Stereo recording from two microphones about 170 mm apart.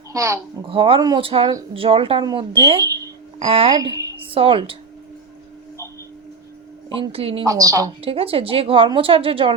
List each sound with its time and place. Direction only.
0.1 s a child's voice: 15° right (ahead or behind)
0.6 s a woman's voice: 30° right (ahead or behind)
3.8 s a woman's voice: 20° right (ahead or behind)
4.3 s a woman's voice: 30° right (ahead or behind)
6.9 s a woman's voice: 35° right (ahead or behind)
7.4 s a woman's voice: 20° right (ahead or behind)
8.0 s a woman's voice: 35° right (ahead or behind)